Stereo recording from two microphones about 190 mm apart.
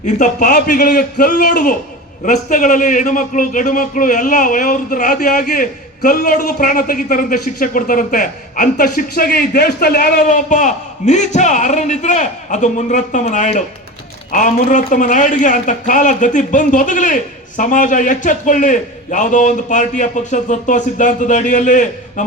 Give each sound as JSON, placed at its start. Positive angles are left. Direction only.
{"t": 0.0, "sound": "a man's voice", "side_deg": 40}